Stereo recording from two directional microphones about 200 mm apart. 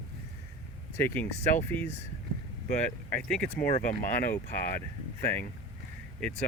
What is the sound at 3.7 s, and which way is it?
Speech, 40° left (ahead or behind).